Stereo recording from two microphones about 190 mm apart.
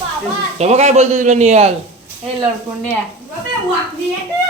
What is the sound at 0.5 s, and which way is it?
A man's voice, 35° right (ahead or behind).